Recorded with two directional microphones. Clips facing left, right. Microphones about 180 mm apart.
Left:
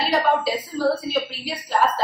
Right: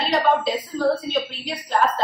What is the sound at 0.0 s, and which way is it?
A woman's voice, 5° left (ahead or behind).